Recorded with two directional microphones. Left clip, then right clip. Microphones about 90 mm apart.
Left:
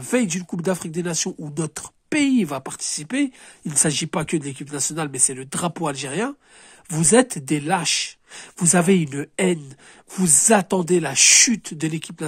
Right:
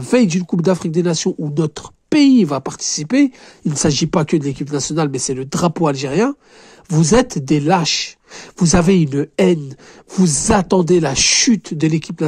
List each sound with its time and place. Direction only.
0.0 s speech: 35° right (ahead or behind); by 2.1 s 20° right (ahead or behind)
2.1 s speech: 30° right (ahead or behind)
7.8 s speech: 30° right (ahead or behind)
11.2 s speech: 25° right (ahead or behind)